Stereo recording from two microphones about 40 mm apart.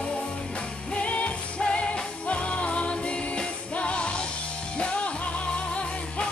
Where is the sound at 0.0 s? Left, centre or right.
Left.